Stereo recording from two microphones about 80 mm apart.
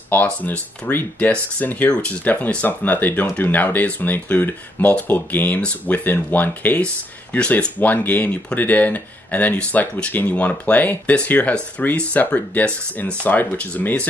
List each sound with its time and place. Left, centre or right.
0.1 s speech: left